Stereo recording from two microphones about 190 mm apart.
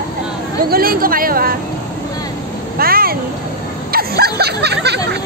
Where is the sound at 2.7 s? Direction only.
50° right (ahead or behind).